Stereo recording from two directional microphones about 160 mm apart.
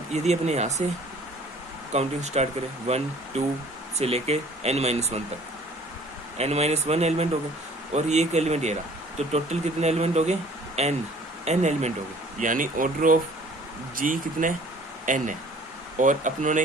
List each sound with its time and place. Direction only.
0.1 s speech: 45° right (ahead or behind)
1.9 s speech: 45° right (ahead or behind)
6.3 s speech: 40° right (ahead or behind)
12.4 s speech: 55° right (ahead or behind)